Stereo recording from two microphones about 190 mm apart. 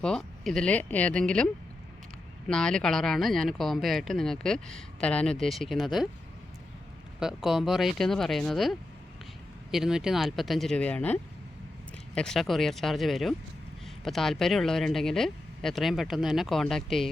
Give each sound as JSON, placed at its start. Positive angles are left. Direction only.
{"t": 0.0, "sound": "speech", "side_deg": 5}
{"t": 2.5, "sound": "speech", "side_deg": 5}
{"t": 7.2, "sound": "speech", "side_deg": 0}
{"t": 9.7, "sound": "speech", "side_deg": 0}